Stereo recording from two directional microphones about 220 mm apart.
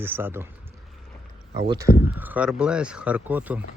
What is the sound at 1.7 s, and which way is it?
Speech, 15° right (ahead or behind).